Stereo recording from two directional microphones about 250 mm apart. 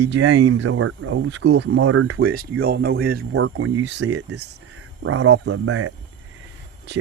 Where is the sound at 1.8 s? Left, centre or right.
Right.